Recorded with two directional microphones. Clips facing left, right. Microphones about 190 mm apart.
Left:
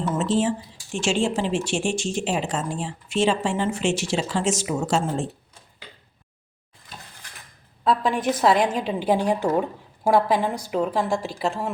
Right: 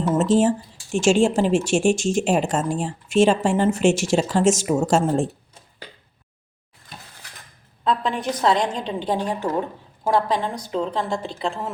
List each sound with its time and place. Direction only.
0.2 s speech: 45° right (ahead or behind)
7.9 s a woman's voice: centre (ahead or behind)